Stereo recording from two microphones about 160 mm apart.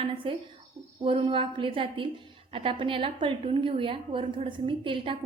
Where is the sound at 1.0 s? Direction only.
35° right (ahead or behind).